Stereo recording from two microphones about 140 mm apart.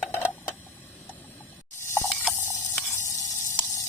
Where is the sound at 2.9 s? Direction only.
20° left (ahead or behind).